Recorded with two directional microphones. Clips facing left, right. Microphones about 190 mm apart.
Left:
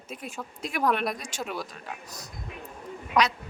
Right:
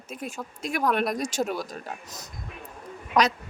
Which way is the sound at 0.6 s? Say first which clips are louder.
Right 1 dB; 45° right (ahead or behind).